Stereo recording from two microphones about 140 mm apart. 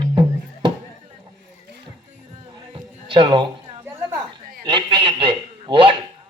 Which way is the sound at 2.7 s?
35° right (ahead or behind).